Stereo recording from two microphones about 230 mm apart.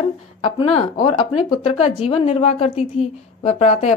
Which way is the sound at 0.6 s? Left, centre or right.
Left.